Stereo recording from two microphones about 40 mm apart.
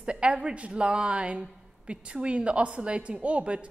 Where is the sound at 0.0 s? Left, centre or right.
Right.